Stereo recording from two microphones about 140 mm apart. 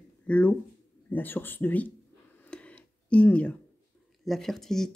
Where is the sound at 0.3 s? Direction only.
10° left (ahead or behind).